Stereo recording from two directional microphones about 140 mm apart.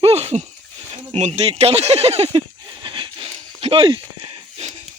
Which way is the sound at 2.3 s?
35° right (ahead or behind).